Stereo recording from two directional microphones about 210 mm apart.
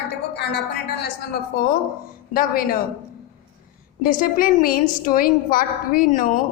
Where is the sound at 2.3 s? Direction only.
45° left (ahead or behind).